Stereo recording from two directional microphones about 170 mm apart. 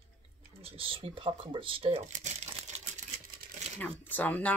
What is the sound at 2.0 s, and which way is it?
Crumpling, 45° right (ahead or behind).